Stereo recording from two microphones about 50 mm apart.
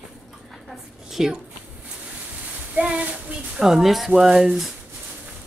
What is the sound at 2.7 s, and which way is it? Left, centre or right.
Speech, right.